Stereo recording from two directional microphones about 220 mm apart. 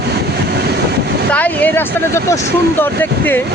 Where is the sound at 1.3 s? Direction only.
5° left (ahead or behind).